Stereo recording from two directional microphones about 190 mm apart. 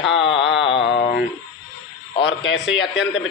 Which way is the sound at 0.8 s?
65° left (ahead or behind).